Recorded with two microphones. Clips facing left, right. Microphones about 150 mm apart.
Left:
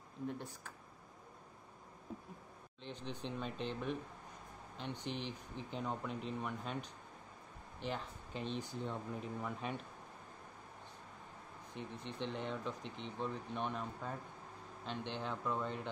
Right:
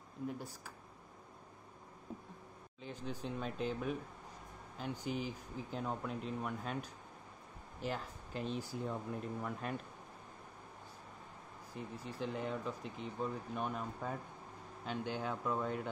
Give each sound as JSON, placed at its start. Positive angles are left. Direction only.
{"t": 0.3, "sound": "speech", "side_deg": -5}
{"t": 2.8, "sound": "speech", "side_deg": -5}
{"t": 11.7, "sound": "speech", "side_deg": -5}